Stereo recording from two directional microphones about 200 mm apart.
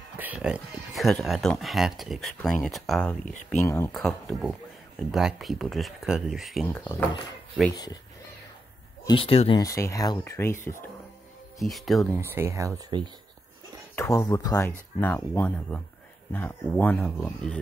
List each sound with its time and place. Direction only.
0.2 s speech: 5° right (ahead or behind)
3.6 s speech: 15° left (ahead or behind)
3.9 s speech: centre (ahead or behind)
6.7 s speech: 10° left (ahead or behind)
9.0 s speech: 25° left (ahead or behind)
9.6 s speech: 15° left (ahead or behind)
11.6 s speech: centre (ahead or behind)
12.2 s speech: 10° right (ahead or behind)
13.9 s speech: 10° left (ahead or behind)